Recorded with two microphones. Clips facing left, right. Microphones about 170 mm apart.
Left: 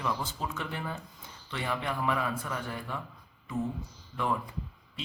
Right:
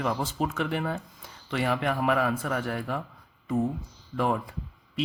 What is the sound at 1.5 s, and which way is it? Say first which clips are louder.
Speech: right 7 dB; 90° right.